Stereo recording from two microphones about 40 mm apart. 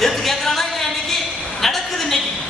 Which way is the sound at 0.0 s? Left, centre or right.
Centre.